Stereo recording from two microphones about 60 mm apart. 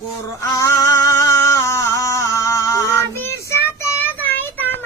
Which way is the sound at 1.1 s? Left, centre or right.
Left.